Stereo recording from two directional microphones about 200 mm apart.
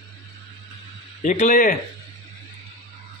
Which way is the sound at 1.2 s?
40° left (ahead or behind).